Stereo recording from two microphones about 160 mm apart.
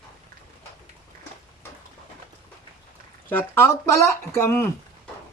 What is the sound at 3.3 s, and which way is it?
Speech, 15° left (ahead or behind).